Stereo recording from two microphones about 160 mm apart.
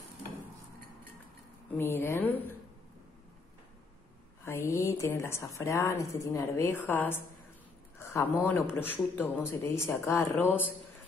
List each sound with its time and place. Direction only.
1.8 s speech: 15° left (ahead or behind)
4.5 s speech: 20° left (ahead or behind)